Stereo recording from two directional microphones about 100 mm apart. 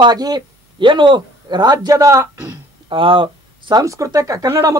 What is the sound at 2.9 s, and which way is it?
Speech, 60° right (ahead or behind).